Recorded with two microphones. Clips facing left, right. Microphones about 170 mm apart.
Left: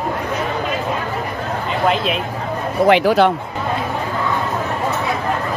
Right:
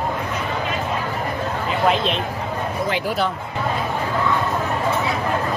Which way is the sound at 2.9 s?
80° left.